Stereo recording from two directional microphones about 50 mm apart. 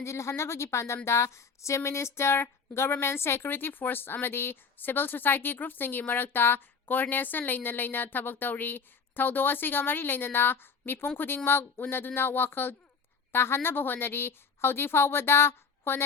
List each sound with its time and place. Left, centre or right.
0.0 s speech: left